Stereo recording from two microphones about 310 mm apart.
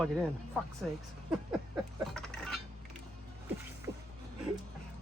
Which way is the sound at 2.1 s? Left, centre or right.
Centre.